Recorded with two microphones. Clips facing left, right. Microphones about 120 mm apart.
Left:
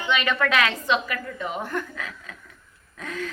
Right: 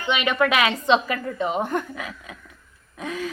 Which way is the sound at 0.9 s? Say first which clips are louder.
Right 5 dB; 25° right (ahead or behind).